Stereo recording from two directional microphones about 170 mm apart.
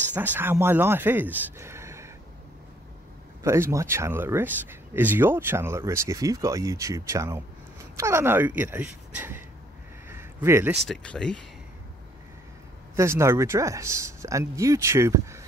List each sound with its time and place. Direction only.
0.1 s speech: 10° right (ahead or behind)
3.4 s speech: 15° right (ahead or behind)
10.0 s a sound: 15° right (ahead or behind)
10.9 s speech: 5° left (ahead or behind)
12.9 s speech: 15° right (ahead or behind)